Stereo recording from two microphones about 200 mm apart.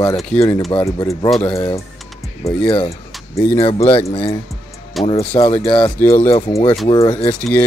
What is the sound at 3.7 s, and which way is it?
Speech, 30° left (ahead or behind).